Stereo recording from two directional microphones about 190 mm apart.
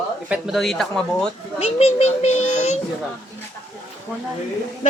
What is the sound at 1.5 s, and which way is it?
A child's voice, 35° left (ahead or behind).